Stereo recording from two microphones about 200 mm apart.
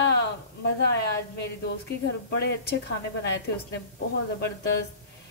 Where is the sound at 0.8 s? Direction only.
55° left (ahead or behind).